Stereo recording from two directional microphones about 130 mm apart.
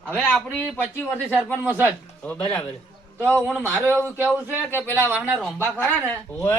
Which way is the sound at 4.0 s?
15° right (ahead or behind).